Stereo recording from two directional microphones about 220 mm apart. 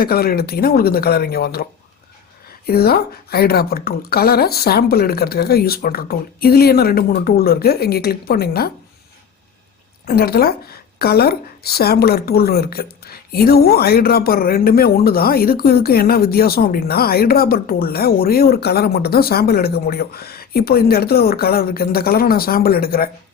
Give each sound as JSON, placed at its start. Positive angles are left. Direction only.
{"t": 0.0, "sound": "speech", "side_deg": 45}
{"t": 2.6, "sound": "speech", "side_deg": 45}
{"t": 10.1, "sound": "speech", "side_deg": 45}